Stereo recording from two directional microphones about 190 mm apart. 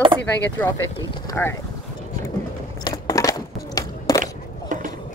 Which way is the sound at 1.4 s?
10° left (ahead or behind).